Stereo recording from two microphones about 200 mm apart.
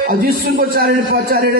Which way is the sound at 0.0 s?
45° right (ahead or behind).